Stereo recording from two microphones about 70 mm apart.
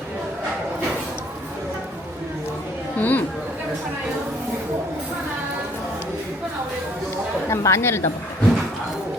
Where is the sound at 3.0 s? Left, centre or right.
Left.